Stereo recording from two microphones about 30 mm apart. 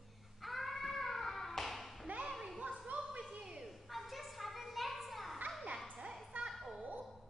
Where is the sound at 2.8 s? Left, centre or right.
Right.